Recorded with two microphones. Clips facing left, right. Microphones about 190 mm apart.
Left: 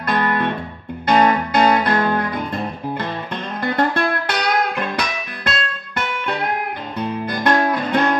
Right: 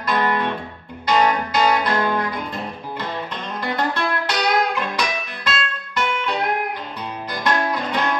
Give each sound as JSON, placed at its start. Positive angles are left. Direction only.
{"t": 0.0, "sound": "guitar", "side_deg": 55}
{"t": 1.0, "sound": "music", "side_deg": 55}
{"t": 3.7, "sound": "music", "side_deg": 55}
{"t": 7.0, "sound": "guitar", "side_deg": 55}